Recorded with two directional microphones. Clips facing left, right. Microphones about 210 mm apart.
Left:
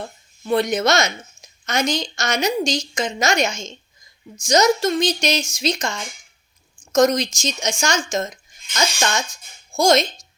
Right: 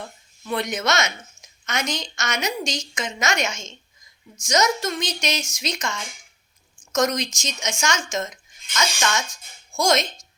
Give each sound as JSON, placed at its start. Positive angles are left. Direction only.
{"t": 0.4, "sound": "a woman's voice", "side_deg": 35}